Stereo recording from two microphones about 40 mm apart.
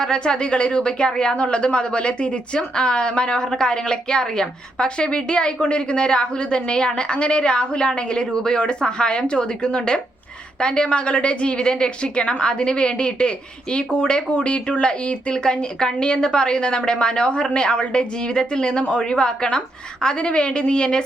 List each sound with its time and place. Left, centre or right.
0.0 s speech: left